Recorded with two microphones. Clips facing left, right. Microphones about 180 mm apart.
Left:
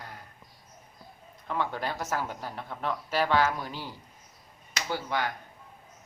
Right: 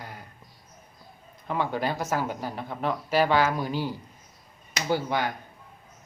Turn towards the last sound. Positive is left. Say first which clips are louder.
# right 5 dB
turn(degrees=-15)  # may be behind; listen again after turning